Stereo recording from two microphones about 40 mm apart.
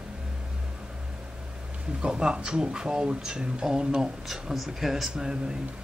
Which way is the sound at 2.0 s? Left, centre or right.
Right.